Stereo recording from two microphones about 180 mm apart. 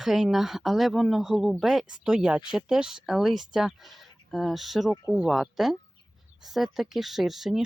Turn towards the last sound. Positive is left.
turn(degrees=0)  # may be behind; listen again after turning